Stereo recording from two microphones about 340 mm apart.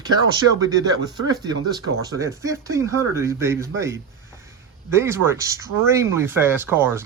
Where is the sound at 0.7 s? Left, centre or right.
Centre.